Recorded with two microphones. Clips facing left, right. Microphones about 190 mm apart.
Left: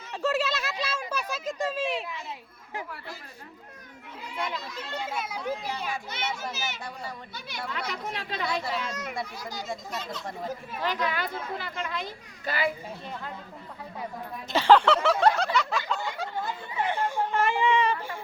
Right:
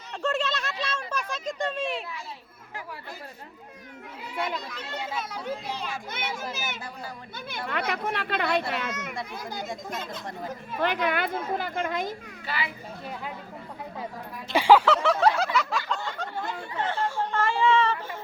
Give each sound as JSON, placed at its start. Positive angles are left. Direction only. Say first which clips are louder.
{"t": 0.1, "sound": "speech", "louder": "left 1 dB", "side_deg": 5}
{"t": 5.1, "sound": "speech", "louder": "left 1 dB", "side_deg": 10}
{"t": 6.1, "sound": "speech", "louder": "even", "side_deg": -50}
{"t": 12.5, "sound": "a child's voice", "louder": "left 5 dB", "side_deg": 45}
{"t": 14.5, "sound": "a sound", "louder": "right 1 dB", "side_deg": -10}